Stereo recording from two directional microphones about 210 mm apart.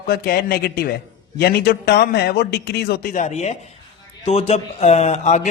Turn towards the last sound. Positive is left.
turn(degrees=35)  # may be behind; listen again after turning